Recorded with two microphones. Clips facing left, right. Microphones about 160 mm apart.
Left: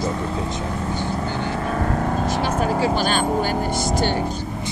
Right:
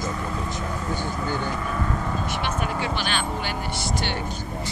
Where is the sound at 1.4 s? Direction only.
55° left (ahead or behind).